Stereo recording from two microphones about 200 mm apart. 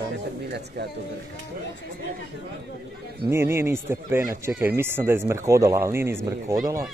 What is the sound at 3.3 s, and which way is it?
Speech, 10° right (ahead or behind).